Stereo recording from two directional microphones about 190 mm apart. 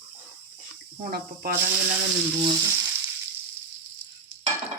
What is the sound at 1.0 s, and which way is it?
Speech, 50° right (ahead or behind).